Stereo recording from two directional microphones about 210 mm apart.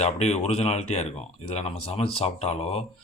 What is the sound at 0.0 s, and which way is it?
Speech, 30° left (ahead or behind).